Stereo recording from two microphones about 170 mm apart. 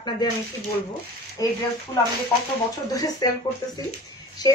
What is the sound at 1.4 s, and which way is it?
Speech, 20° left (ahead or behind).